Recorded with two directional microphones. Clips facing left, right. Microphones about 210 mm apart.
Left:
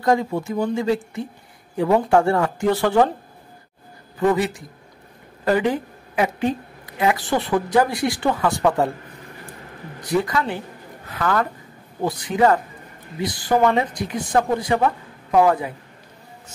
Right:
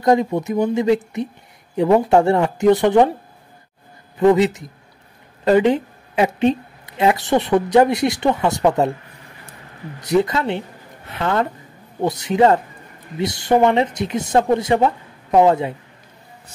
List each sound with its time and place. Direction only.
0.0 s speech: 20° right (ahead or behind)
4.2 s a woman's voice: 20° right (ahead or behind)
10.0 s speech: 25° right (ahead or behind)